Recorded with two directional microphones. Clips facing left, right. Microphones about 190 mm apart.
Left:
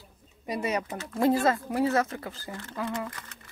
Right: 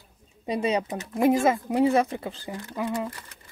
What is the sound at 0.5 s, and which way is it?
Speech, 25° right (ahead or behind).